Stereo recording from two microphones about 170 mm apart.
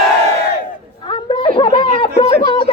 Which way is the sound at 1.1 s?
30° left (ahead or behind).